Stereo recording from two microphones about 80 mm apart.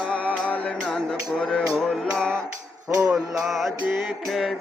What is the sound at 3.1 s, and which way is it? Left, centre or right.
Music, centre.